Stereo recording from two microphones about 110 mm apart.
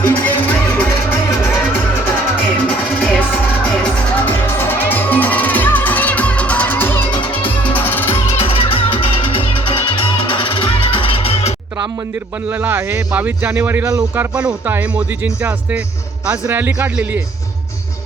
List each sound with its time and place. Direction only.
0.0 s music: 15° left (ahead or behind)
2.6 s music: 10° left (ahead or behind)
7.1 s music: 50° left (ahead or behind)
7.7 s music: 15° left (ahead or behind)
8.4 s music: 55° left (ahead or behind)
12.5 s speech: 20° right (ahead or behind)